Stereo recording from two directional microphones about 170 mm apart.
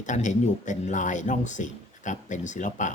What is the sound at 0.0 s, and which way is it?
Speech, 45° left (ahead or behind).